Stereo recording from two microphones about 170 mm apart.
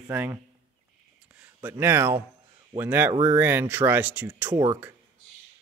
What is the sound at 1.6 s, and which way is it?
Speech, 15° right (ahead or behind).